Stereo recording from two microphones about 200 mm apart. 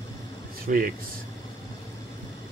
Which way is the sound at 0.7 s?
45° right (ahead or behind).